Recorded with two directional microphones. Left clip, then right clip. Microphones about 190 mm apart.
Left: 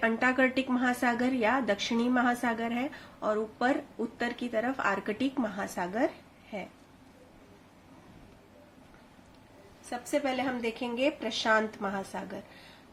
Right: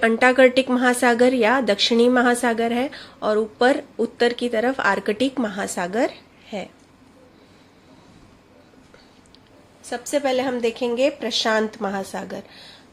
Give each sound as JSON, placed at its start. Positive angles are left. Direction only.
{"t": 0.0, "sound": "a woman's voice", "side_deg": -40}
{"t": 10.0, "sound": "a woman's voice", "side_deg": -40}